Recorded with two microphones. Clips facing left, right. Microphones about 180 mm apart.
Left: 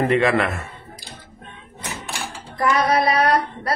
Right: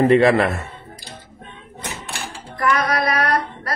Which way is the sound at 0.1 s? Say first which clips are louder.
Right 4 dB; 35° right (ahead or behind).